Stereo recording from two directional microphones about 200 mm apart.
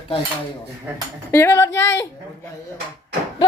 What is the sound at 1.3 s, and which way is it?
Speech, 10° left (ahead or behind).